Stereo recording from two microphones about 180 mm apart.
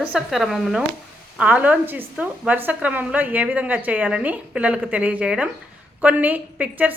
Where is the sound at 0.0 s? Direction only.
5° right (ahead or behind).